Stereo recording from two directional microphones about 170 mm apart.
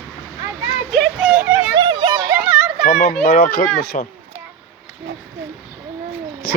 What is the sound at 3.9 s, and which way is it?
Speech, 45° left (ahead or behind).